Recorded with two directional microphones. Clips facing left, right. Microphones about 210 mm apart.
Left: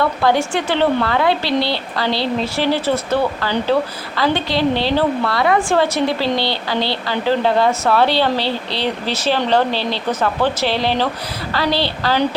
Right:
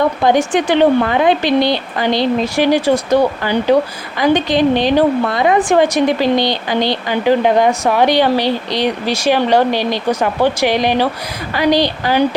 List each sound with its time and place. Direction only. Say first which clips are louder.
0.0 s a woman's voice: right 3 dB; 20° right (ahead or behind)